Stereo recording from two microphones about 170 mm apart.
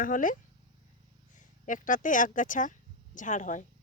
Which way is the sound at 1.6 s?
50° left (ahead or behind).